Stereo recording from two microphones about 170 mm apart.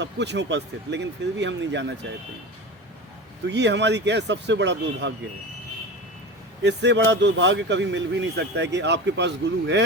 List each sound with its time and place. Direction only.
0.0 s speech: 90° right
3.4 s speech: 90° right
6.6 s speech: 90° right